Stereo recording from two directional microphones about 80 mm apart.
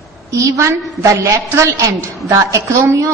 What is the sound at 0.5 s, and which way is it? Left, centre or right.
A man's voice, right.